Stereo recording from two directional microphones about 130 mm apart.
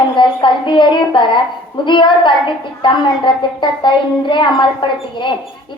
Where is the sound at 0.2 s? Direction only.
40° left (ahead or behind).